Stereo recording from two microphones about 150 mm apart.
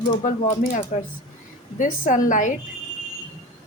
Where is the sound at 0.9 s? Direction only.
50° left (ahead or behind).